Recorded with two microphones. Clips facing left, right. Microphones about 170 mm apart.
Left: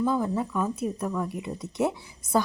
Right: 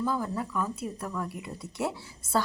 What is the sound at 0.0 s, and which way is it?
Speech, 20° left (ahead or behind).